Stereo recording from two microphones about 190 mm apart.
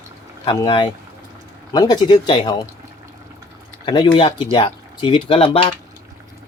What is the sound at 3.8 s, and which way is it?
Speech, 25° left (ahead or behind).